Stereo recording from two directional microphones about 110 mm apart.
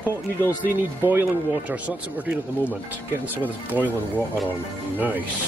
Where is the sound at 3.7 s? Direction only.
15° right (ahead or behind).